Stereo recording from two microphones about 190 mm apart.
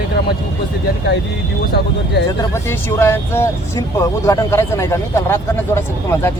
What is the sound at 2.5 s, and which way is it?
Speech, 10° left (ahead or behind).